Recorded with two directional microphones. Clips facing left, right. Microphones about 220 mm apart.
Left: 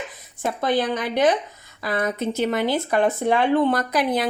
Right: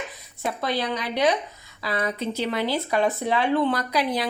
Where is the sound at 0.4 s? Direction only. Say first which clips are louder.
Left 4 dB; 50° left (ahead or behind).